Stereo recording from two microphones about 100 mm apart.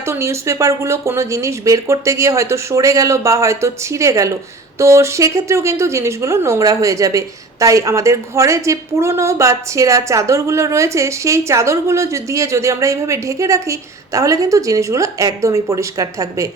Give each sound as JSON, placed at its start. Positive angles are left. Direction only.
{"t": 0.0, "sound": "a woman's voice", "side_deg": -25}